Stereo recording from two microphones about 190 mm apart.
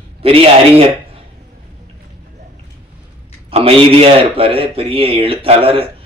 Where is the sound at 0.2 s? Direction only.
30° right (ahead or behind).